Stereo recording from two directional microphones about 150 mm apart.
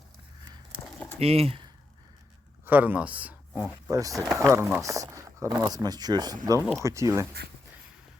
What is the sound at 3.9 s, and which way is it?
Speech, 20° right (ahead or behind).